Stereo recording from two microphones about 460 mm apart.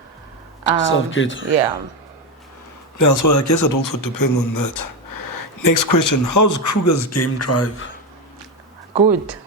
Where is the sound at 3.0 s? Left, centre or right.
Left.